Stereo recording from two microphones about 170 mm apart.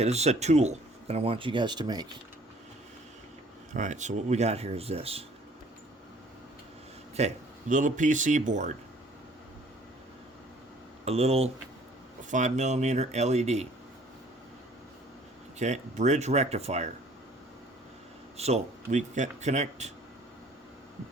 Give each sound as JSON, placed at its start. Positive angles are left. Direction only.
{"t": 0.0, "sound": "speech", "side_deg": -40}
{"t": 3.8, "sound": "speech", "side_deg": -45}
{"t": 7.2, "sound": "speech", "side_deg": -45}
{"t": 11.0, "sound": "speech", "side_deg": -35}
{"t": 15.5, "sound": "speech", "side_deg": -45}
{"t": 18.3, "sound": "speech", "side_deg": -40}